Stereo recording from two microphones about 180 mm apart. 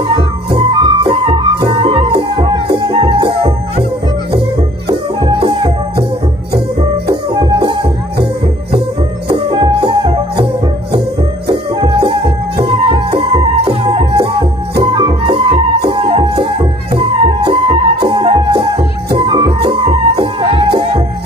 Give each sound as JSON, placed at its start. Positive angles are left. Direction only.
{"t": 0.1, "sound": "music", "side_deg": -30}
{"t": 4.8, "sound": "music", "side_deg": -30}
{"t": 7.3, "sound": "music", "side_deg": -25}
{"t": 9.3, "sound": "music", "side_deg": -30}
{"t": 11.4, "sound": "music", "side_deg": -30}